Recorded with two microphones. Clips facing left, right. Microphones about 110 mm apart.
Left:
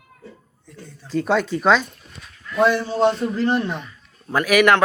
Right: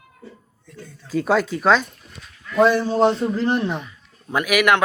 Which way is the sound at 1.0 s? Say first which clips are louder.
Right 1 dB; 5° right (ahead or behind).